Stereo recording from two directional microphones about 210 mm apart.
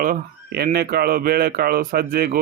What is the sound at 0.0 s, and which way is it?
Speech, 45° right (ahead or behind).